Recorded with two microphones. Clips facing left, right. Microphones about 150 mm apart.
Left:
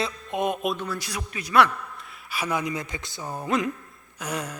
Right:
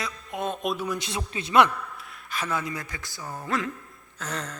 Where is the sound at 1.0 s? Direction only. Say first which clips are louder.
Right 2 dB; 25° right (ahead or behind).